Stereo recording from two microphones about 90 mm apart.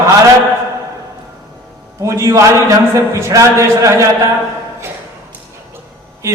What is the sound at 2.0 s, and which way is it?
A man's voice, 35° right (ahead or behind).